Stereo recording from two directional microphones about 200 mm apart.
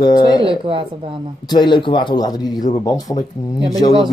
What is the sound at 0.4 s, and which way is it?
Speech, 25° right (ahead or behind).